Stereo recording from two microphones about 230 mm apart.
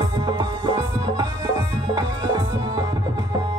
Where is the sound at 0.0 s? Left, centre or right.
Right.